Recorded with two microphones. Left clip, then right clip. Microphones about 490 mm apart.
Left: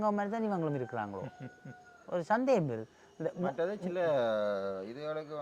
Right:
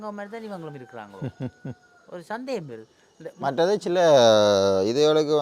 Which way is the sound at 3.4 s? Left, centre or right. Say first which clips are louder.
Right 14 dB; right.